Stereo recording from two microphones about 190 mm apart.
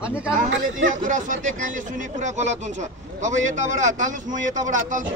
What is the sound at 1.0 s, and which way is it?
A man's voice, 40° right (ahead or behind).